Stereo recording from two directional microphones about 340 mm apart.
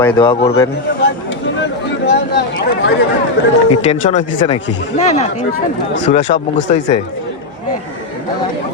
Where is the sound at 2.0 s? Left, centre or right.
Left.